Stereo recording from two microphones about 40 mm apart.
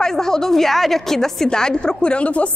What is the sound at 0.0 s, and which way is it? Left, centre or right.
Speech, centre.